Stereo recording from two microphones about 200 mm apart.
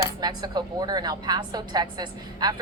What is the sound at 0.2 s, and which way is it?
A woman's voice, 20° right (ahead or behind).